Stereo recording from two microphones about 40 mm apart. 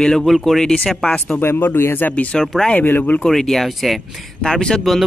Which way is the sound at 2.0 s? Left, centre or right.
Left.